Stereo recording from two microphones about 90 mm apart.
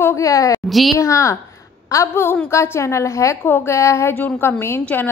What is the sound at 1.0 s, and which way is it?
A woman's voice, 35° left (ahead or behind).